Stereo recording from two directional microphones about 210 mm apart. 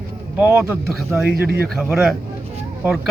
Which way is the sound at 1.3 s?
45° right (ahead or behind).